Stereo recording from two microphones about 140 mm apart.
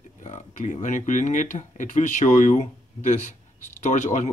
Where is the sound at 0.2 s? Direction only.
60° left (ahead or behind).